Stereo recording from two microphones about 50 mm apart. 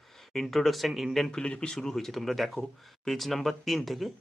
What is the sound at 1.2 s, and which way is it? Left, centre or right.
Speech, centre.